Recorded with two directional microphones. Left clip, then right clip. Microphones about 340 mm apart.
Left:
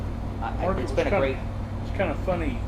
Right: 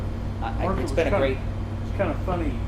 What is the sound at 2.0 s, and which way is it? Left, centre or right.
Speech, left.